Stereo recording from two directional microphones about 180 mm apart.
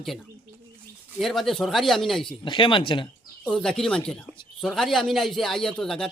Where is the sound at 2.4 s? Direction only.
25° left (ahead or behind).